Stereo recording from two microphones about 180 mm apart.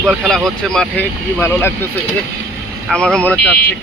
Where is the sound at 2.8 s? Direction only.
5° left (ahead or behind).